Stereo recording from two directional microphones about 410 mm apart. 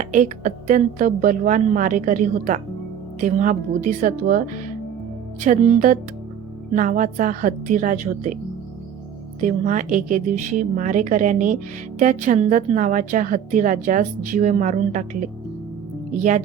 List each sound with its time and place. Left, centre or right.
0.0 s speech: centre
9.4 s speech: centre